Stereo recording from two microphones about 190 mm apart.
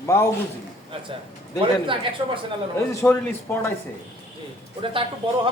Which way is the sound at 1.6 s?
25° right (ahead or behind).